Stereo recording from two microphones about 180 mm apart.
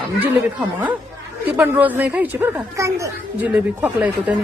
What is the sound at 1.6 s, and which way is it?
Speech, 10° right (ahead or behind).